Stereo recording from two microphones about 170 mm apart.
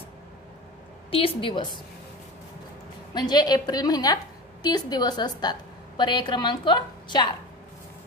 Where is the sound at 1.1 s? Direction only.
35° left (ahead or behind).